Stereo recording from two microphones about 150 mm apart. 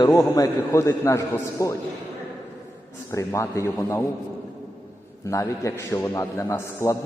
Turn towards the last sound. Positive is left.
turn(degrees=20)  # may be behind; listen again after turning